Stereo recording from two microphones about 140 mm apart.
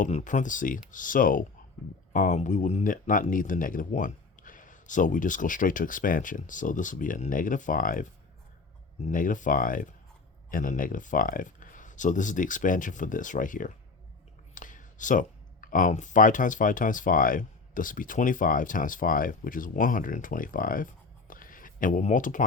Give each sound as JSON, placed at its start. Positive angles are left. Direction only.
{"t": 0.0, "sound": "speech", "side_deg": 65}
{"t": 2.1, "sound": "speech", "side_deg": 65}
{"t": 9.0, "sound": "speech", "side_deg": 70}
{"t": 21.2, "sound": "a sound", "side_deg": 80}